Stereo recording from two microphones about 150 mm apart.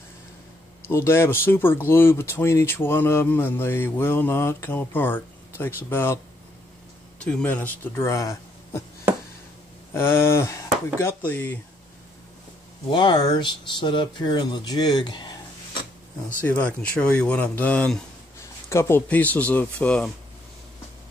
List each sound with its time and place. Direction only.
0.8 s speech: 15° left (ahead or behind)
7.2 s speech: 5° left (ahead or behind)
9.9 s speech: 15° left (ahead or behind)
12.9 s speech: 30° left (ahead or behind)
16.4 s speech: 10° left (ahead or behind)